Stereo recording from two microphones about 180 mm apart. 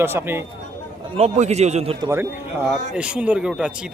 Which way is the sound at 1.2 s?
40° right (ahead or behind).